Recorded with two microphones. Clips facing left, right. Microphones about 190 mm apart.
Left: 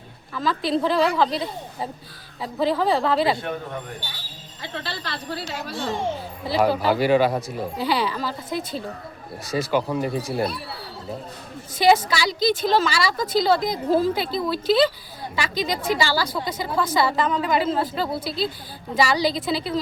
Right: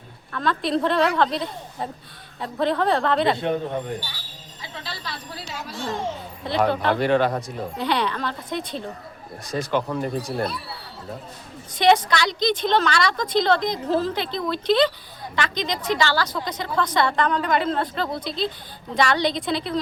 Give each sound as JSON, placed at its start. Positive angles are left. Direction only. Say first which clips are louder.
{"t": 0.3, "sound": "a woman's voice", "louder": "even", "side_deg": 0}
{"t": 3.3, "sound": "speech", "louder": "right 5 dB", "side_deg": -20}
{"t": 4.6, "sound": "speech", "louder": "left 4 dB", "side_deg": 65}
{"t": 6.4, "sound": "a woman's voice", "louder": "left 1 dB", "side_deg": 5}
{"t": 11.7, "sound": "a woman's voice", "louder": "even", "side_deg": 5}